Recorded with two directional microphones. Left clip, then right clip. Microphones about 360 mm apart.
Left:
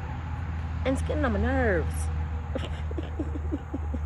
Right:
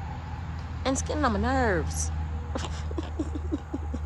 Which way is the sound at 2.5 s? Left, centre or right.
Right.